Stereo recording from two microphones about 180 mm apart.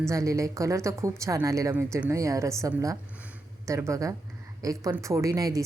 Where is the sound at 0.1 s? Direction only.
15° right (ahead or behind).